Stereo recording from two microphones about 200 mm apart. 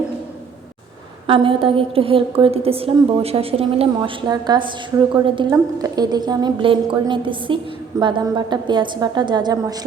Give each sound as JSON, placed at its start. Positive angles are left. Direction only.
{"t": 1.3, "sound": "a woman's voice", "side_deg": -25}